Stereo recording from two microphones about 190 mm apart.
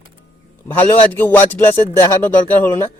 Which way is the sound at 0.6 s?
10° left (ahead or behind).